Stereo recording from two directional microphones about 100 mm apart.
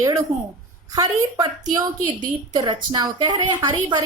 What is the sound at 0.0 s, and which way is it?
A woman's voice, 35° right (ahead or behind).